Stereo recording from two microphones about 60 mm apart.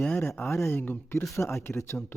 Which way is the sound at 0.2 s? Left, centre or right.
Left.